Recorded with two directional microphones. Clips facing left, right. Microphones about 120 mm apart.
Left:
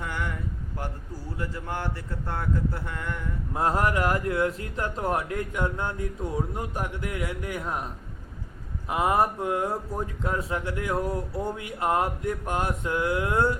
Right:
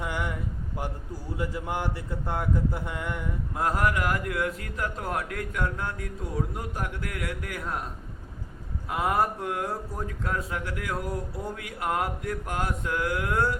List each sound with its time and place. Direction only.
0.0 s a sound: 15° right (ahead or behind)
1.4 s speech: 15° right (ahead or behind)
3.5 s a man's voice: 25° left (ahead or behind)
8.9 s a man's voice: 20° left (ahead or behind)